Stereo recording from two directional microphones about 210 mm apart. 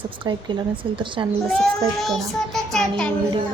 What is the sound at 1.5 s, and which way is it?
Child singing, centre (ahead or behind).